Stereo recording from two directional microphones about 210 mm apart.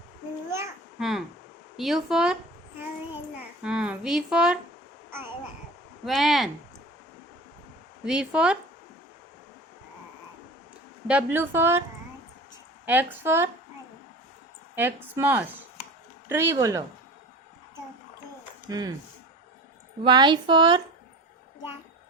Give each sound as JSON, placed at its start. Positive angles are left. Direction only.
{"t": 0.9, "sound": "speech", "side_deg": 0}
{"t": 3.6, "sound": "speech", "side_deg": -5}
{"t": 6.1, "sound": "speech", "side_deg": 0}
{"t": 8.0, "sound": "speech", "side_deg": -5}
{"t": 11.1, "sound": "a woman's voice", "side_deg": -10}
{"t": 12.8, "sound": "a woman's voice", "side_deg": -10}
{"t": 14.8, "sound": "a woman's voice", "side_deg": -10}
{"t": 18.7, "sound": "a woman's voice", "side_deg": -20}
{"t": 20.1, "sound": "a woman's voice", "side_deg": -20}